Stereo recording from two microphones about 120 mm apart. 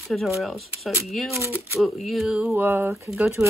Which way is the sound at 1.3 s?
20° right (ahead or behind).